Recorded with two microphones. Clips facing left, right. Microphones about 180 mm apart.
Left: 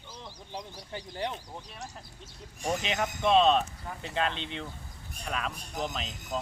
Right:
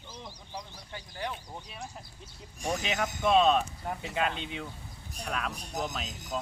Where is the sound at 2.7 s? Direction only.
Centre (ahead or behind).